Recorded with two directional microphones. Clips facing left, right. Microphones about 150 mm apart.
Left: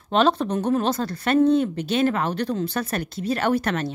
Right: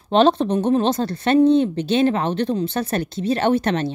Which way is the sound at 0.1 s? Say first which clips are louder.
Right 4 dB; 30° right (ahead or behind).